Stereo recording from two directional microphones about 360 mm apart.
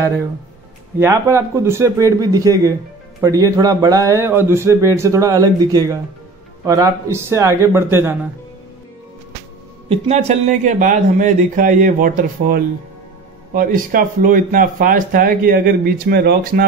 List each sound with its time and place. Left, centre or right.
0.9 s a man's voice: centre
9.8 s speech: centre